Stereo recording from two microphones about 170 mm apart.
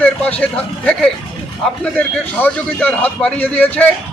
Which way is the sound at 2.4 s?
10° left (ahead or behind).